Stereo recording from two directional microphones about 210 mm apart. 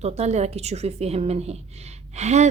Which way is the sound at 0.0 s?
30° right (ahead or behind).